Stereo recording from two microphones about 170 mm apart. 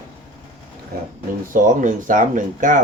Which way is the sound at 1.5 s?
50° right (ahead or behind).